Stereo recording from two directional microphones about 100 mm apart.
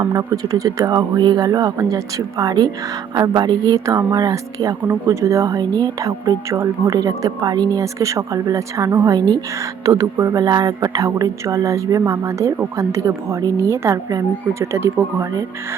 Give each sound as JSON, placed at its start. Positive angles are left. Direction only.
{"t": 0.1, "sound": "speech", "side_deg": -35}